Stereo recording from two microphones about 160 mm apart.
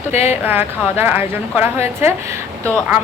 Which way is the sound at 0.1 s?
45° left (ahead or behind).